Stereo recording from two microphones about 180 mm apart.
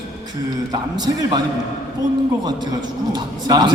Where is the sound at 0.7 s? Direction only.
20° right (ahead or behind).